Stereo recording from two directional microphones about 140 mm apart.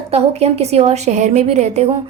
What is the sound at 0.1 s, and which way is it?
A woman's voice, 50° right (ahead or behind).